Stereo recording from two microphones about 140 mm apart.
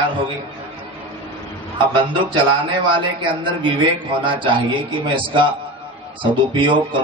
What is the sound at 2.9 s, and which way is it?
Speech, 35° right (ahead or behind).